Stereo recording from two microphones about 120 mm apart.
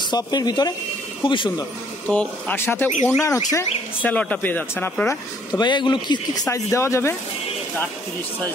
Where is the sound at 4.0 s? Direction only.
10° left (ahead or behind).